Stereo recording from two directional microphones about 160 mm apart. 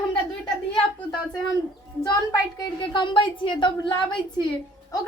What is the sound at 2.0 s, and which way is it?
A woman's voice, 25° left (ahead or behind).